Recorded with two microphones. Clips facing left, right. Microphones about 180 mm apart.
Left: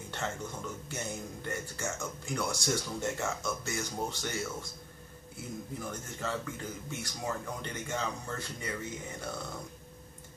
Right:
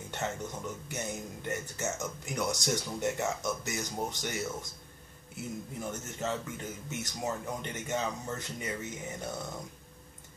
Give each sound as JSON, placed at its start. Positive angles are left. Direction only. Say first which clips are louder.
{"t": 0.1, "sound": "speech", "louder": "right 2 dB", "side_deg": -20}
{"t": 5.9, "sound": "speech", "louder": "right 3 dB", "side_deg": -20}